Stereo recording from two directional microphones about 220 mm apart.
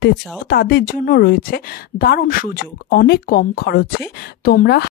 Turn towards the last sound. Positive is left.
turn(degrees=45)  # may be behind; listen again after turning